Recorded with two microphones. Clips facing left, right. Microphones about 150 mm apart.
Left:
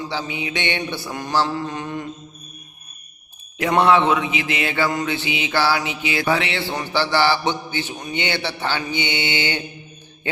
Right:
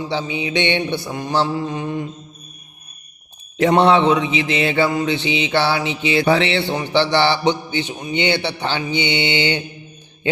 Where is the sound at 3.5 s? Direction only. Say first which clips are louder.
Right 3 dB; 30° right (ahead or behind).